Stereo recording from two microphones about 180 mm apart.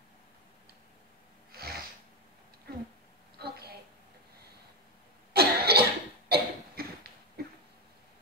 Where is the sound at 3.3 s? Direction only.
60° right (ahead or behind).